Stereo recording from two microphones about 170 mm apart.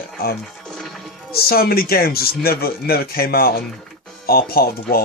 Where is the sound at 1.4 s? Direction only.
65° left (ahead or behind).